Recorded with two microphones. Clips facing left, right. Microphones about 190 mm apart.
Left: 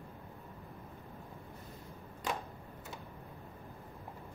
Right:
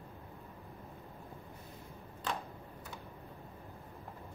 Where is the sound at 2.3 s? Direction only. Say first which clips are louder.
Left 1 dB; 10° left (ahead or behind).